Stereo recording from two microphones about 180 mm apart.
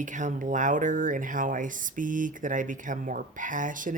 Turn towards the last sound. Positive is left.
turn(degrees=-45)  # may be behind; listen again after turning